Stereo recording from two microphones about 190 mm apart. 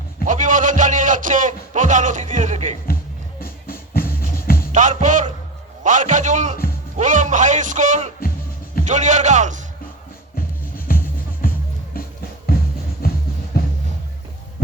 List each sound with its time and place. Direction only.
0.3 s a sound: 40° right (ahead or behind)
3.4 s music: 50° left (ahead or behind)
4.7 s music: 40° right (ahead or behind)
5.8 s a man's voice: 40° right (ahead or behind)
6.9 s music: 40° right (ahead or behind)
8.8 s a man's voice: 40° right (ahead or behind)
10.3 s music: 50° left (ahead or behind)
13.0 s music: 55° left (ahead or behind)